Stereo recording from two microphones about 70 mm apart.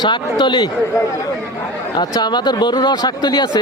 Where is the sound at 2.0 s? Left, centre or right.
Left.